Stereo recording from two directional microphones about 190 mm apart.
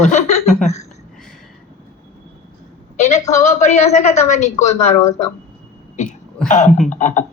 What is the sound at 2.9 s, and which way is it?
A woman's voice, 35° left (ahead or behind).